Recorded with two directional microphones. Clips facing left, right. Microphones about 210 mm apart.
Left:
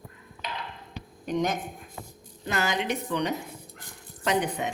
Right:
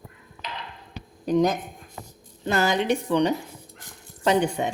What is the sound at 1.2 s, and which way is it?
A woman's voice, 35° right (ahead or behind).